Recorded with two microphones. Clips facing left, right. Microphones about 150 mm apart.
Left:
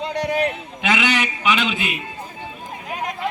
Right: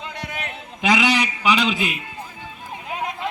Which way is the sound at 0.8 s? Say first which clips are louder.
Right 2 dB; 35° right (ahead or behind).